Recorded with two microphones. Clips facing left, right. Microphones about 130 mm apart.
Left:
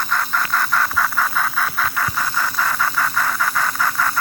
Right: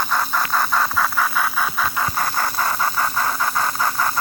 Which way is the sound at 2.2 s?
40° right (ahead or behind).